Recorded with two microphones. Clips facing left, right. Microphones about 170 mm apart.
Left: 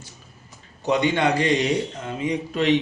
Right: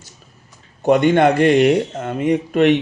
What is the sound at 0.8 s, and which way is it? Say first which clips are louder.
A man's voice: right 8 dB; 50° right (ahead or behind).